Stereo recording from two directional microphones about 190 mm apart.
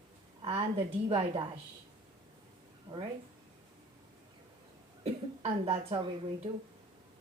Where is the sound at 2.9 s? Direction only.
20° right (ahead or behind).